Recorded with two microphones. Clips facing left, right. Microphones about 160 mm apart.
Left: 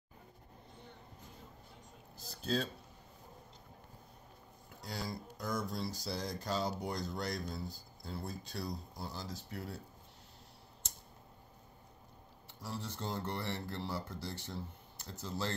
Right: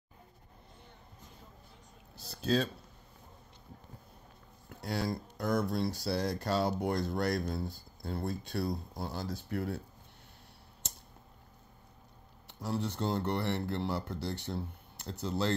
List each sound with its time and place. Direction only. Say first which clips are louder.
2.1 s a sound: right 6 dB; 80° right
4.8 s speech: right 8 dB; 65° right (ahead or behind)
12.4 s speech: right 8 dB; 65° right (ahead or behind)